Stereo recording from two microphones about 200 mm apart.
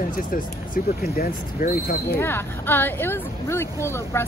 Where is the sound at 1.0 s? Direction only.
50° left (ahead or behind).